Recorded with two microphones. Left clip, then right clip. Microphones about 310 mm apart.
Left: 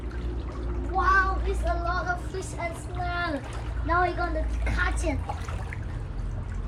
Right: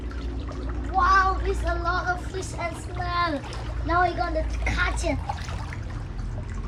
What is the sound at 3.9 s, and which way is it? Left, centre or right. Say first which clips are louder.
A child's voice: right 2 dB; centre.